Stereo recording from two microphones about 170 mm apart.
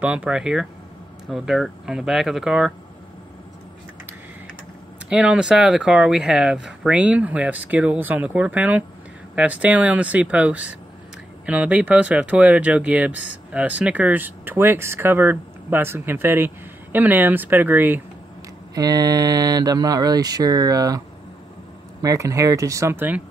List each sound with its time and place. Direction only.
0.0 s speech: 5° right (ahead or behind)
5.1 s speech: 5° right (ahead or behind)
18.8 s speech: 20° right (ahead or behind)
22.0 s speech: 20° right (ahead or behind)